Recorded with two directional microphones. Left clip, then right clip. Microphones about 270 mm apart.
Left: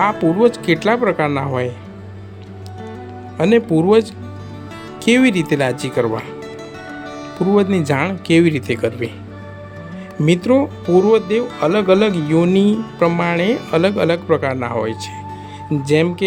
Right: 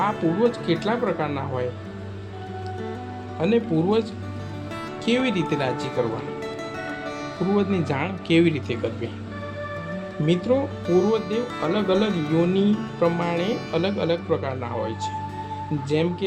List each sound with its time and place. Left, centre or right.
0.0 s speech: left
3.3 s speech: left
5.0 s speech: left
7.5 s speech: left
10.2 s speech: left
10.8 s speech: centre
11.6 s speech: left